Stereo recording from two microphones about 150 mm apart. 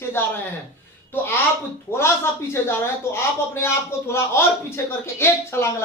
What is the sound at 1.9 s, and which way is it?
Speech, 15° left (ahead or behind).